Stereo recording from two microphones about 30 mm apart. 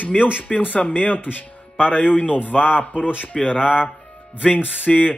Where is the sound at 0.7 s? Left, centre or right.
Left.